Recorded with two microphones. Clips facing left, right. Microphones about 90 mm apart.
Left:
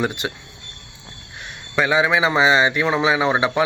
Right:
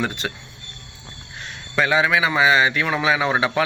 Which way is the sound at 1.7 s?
15° left (ahead or behind).